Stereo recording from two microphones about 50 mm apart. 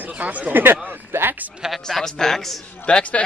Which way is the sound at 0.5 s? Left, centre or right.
Right.